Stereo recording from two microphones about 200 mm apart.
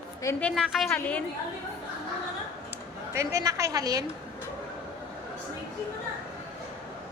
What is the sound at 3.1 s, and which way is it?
Speech, 15° right (ahead or behind).